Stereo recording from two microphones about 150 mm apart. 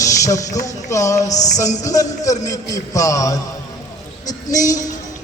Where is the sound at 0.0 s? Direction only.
20° left (ahead or behind).